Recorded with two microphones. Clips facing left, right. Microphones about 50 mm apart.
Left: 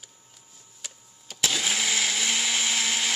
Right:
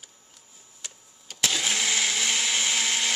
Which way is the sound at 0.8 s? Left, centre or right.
Centre.